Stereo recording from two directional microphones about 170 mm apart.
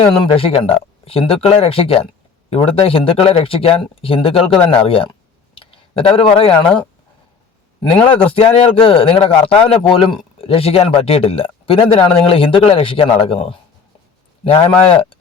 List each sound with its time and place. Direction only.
0.0 s speech: 30° left (ahead or behind)
7.8 s speech: 30° left (ahead or behind)